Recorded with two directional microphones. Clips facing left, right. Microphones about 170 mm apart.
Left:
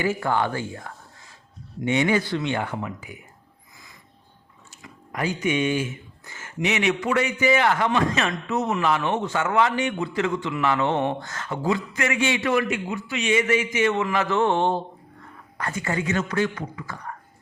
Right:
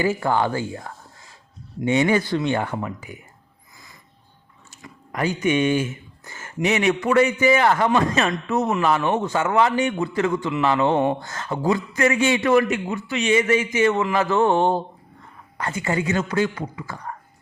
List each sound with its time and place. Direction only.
0.0 s a man's voice: 30° right (ahead or behind)
1.8 s a man's voice: 35° right (ahead or behind)
4.8 s a man's voice: 45° right (ahead or behind)
9.4 s a man's voice: 30° right (ahead or behind)
10.6 s a man's voice: 30° right (ahead or behind)
15.5 s speech: 25° right (ahead or behind)